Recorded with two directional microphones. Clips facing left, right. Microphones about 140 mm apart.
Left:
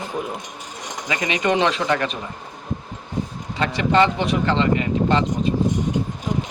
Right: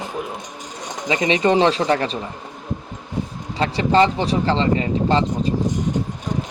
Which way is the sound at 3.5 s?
30° right (ahead or behind).